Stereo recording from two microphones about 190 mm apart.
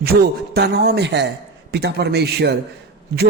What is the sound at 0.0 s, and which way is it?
A man's voice, 55° right (ahead or behind).